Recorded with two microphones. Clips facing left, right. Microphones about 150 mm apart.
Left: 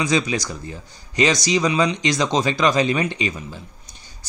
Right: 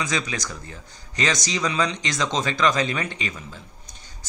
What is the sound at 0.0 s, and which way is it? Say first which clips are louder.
Speech: left 7 dB; 20° left (ahead or behind).